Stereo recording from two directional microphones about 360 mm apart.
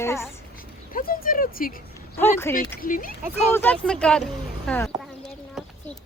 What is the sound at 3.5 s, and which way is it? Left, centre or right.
Speech, centre.